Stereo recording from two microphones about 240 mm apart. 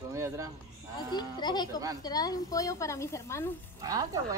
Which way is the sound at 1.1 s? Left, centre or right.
Centre.